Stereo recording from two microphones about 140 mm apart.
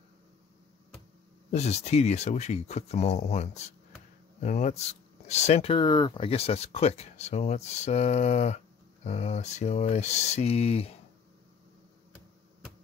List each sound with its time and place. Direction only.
1.5 s speech: 50° left (ahead or behind)